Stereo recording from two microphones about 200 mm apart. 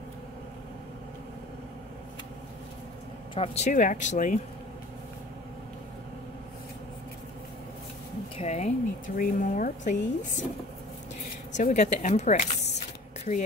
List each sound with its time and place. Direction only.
3.3 s speech: 35° left (ahead or behind)
8.4 s speech: 35° left (ahead or behind)
11.5 s speech: 35° left (ahead or behind)